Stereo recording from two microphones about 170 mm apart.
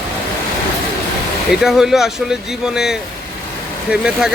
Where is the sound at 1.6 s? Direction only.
Centre (ahead or behind).